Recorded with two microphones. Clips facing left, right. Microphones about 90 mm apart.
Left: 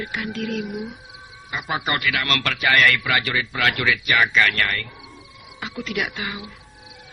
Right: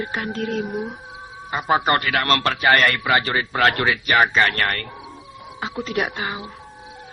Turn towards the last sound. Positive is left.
turn(degrees=-35)  # may be behind; listen again after turning